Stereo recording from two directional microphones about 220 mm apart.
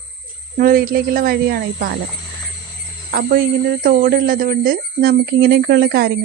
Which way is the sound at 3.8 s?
40° right (ahead or behind).